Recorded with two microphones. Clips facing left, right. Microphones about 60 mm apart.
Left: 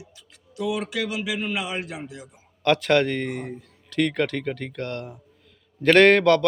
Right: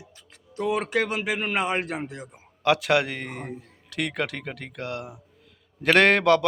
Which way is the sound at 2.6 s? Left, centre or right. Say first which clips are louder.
Left 2 dB; centre.